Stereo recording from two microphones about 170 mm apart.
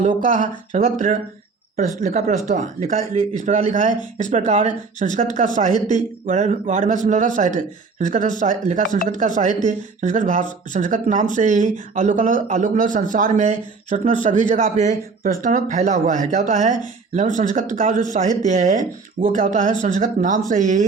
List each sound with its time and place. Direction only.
0.0 s speech: 45° right (ahead or behind)